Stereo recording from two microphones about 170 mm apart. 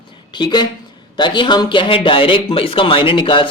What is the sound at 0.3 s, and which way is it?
A man's voice, 25° left (ahead or behind).